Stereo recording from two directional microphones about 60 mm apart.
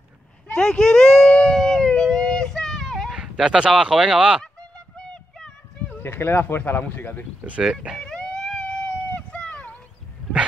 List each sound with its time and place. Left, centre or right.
0.5 s a sound: centre
1.6 s music: centre
3.1 s speech: centre
4.9 s a sound: centre
6.0 s speech: left
8.0 s wail: centre
8.8 s run: centre